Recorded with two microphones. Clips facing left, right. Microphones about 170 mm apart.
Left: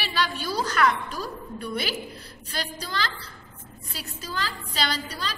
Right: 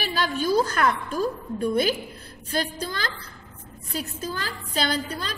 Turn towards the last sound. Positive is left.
turn(degrees=-55)  # may be behind; listen again after turning